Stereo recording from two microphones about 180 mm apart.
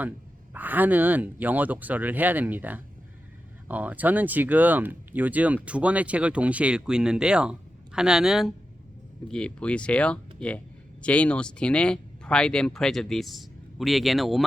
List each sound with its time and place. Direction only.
0.5 s speech: 10° right (ahead or behind)